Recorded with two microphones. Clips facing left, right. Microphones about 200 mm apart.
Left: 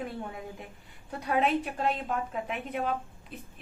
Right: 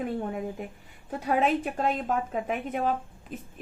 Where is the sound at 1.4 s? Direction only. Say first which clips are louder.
Even; 45° right (ahead or behind).